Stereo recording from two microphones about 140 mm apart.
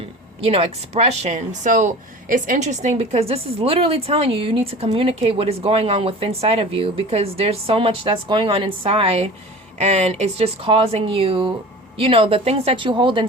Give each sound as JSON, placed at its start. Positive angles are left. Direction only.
{"t": 0.4, "sound": "speech", "side_deg": -45}